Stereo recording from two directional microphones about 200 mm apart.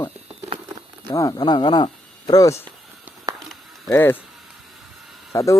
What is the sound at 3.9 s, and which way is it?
Speech, 10° left (ahead or behind).